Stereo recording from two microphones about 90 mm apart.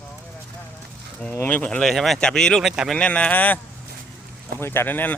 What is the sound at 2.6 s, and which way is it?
Speech, 5° right (ahead or behind).